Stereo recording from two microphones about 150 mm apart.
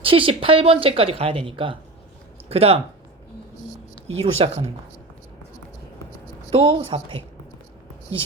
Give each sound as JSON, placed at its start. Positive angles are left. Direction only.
{"t": 0.0, "sound": "speech", "side_deg": -35}
{"t": 4.1, "sound": "speech", "side_deg": -40}
{"t": 6.5, "sound": "speech", "side_deg": -35}